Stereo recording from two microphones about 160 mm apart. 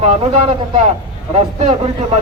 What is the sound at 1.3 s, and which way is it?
Speech, 40° right (ahead or behind).